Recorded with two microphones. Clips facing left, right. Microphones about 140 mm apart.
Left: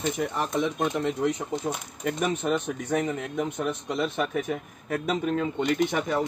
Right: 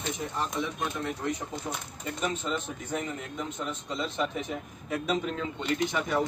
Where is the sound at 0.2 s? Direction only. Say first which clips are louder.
Left 5 dB; 75° left (ahead or behind).